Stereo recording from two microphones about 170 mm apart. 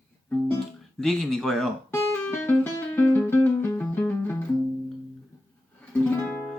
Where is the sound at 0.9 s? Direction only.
5° left (ahead or behind).